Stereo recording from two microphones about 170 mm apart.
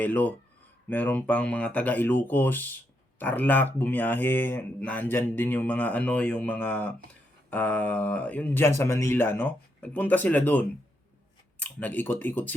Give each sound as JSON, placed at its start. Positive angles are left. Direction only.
{"t": 0.0, "sound": "speech", "side_deg": 10}